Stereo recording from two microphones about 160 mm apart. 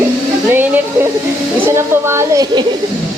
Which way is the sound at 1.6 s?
15° right (ahead or behind).